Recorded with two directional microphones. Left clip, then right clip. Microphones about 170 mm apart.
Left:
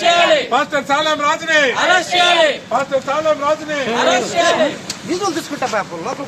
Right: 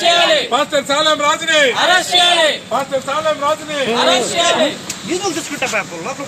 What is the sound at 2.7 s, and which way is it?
Speech, 15° right (ahead or behind).